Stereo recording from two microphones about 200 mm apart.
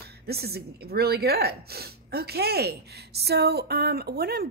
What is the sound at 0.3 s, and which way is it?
A woman's voice, 50° right (ahead or behind).